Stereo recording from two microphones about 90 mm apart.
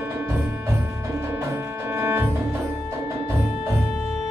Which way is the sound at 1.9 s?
25° right (ahead or behind).